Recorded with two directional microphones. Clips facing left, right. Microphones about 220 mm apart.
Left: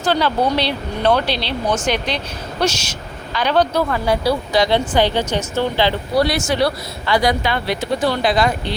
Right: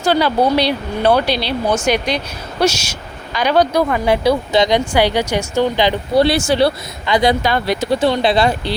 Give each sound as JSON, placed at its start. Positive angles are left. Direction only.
{"t": 0.0, "sound": "speech", "side_deg": -10}
{"t": 6.2, "sound": "speech", "side_deg": -30}
{"t": 7.4, "sound": "speech", "side_deg": -40}
{"t": 7.9, "sound": "speech", "side_deg": -25}